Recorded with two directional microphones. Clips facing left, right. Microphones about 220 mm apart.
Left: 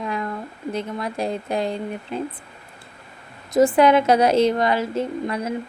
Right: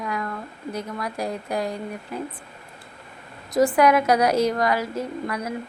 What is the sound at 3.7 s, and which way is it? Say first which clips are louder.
Speech: left 1 dB; 25° left (ahead or behind).